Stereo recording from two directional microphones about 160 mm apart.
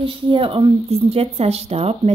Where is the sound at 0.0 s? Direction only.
35° right (ahead or behind).